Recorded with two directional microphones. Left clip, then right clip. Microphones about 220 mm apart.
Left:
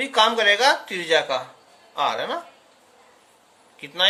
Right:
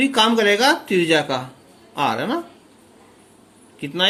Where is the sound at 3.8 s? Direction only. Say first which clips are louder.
Right 1 dB; 15° right (ahead or behind).